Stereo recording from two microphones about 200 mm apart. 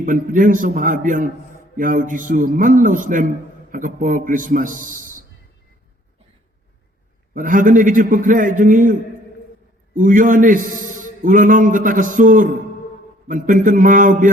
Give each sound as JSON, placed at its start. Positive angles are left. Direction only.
{"t": 0.0, "sound": "a man's voice", "side_deg": -40}
{"t": 7.3, "sound": "a man's voice", "side_deg": -40}